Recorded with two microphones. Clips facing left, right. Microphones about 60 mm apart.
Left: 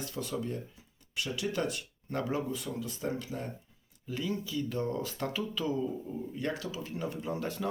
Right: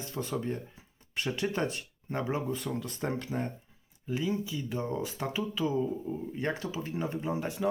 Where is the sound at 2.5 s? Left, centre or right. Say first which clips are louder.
Right 2 dB; right.